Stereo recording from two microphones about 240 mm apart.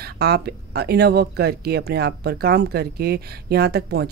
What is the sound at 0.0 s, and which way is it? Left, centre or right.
Speech, right.